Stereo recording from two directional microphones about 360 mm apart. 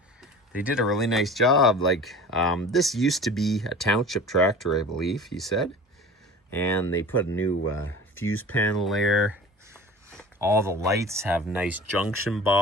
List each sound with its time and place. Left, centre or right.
0.2 s speech: centre
7.6 s speech: left
8.4 s speech: centre